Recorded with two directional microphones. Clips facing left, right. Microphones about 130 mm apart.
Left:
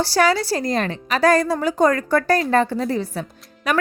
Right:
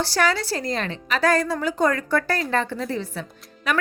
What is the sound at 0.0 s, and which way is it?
A woman's voice, 35° left (ahead or behind).